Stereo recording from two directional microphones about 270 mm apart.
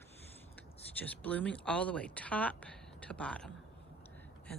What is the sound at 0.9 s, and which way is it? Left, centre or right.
Speech, centre.